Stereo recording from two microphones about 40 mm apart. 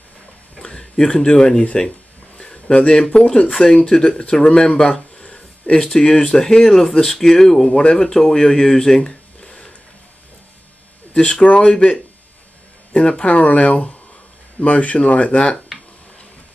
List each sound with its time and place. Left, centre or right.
0.6 s speech: left
2.4 s a sound: centre
2.9 s speech: centre
5.1 s a sound: left
5.8 s speech: centre
6.0 s speech: left
6.4 s speech: centre
11.1 s speech: centre
11.4 s speech: left
13.0 s speech: left